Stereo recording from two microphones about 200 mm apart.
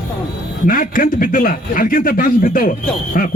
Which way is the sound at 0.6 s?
45° left (ahead or behind).